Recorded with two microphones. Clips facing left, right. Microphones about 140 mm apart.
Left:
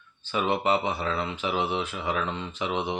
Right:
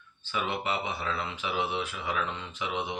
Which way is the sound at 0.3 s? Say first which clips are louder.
Left 7 dB; 35° left (ahead or behind).